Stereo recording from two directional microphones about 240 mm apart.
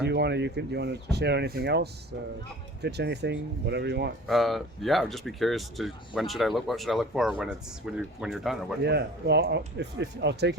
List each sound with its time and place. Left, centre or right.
0.0 s speech: right
4.3 s speech: centre
8.8 s speech: right